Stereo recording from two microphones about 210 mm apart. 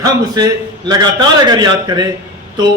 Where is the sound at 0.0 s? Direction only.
20° right (ahead or behind).